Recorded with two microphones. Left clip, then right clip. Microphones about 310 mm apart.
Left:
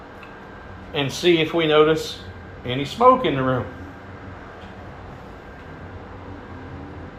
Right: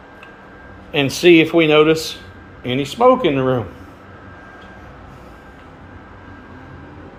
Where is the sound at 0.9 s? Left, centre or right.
Right.